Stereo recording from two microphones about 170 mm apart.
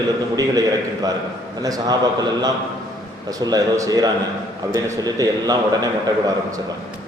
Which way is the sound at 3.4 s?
20° right (ahead or behind).